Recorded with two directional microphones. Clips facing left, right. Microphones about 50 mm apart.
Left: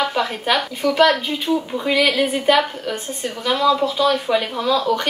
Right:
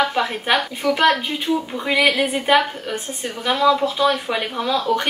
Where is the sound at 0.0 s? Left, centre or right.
Centre.